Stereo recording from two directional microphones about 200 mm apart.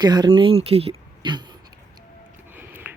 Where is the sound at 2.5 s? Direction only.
10° right (ahead or behind).